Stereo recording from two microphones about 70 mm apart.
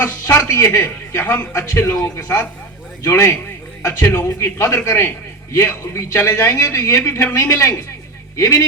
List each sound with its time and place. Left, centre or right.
0.0 s a man's voice: left